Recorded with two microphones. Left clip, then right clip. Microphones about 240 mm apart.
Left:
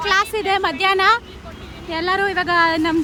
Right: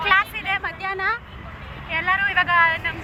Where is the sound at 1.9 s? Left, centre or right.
Left.